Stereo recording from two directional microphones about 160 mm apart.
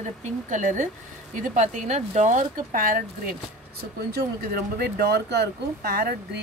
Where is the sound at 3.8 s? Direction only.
85° right.